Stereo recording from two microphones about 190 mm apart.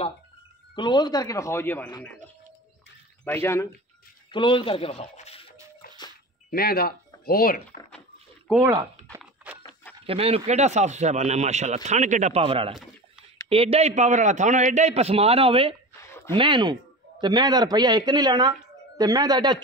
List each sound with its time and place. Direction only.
0.7 s speech: 25° left (ahead or behind)
3.3 s speech: 15° left (ahead or behind)
4.3 s speech: 25° left (ahead or behind)
6.5 s speech: 55° left (ahead or behind)
8.5 s speech: 5° right (ahead or behind)
9.2 s a sound: 10° right (ahead or behind)
10.0 s speech: 30° right (ahead or behind)
16.0 s a sound: 15° left (ahead or behind)
16.3 s speech: 25° right (ahead or behind)